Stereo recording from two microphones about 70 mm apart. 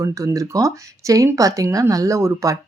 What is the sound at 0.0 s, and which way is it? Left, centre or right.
Speech, right.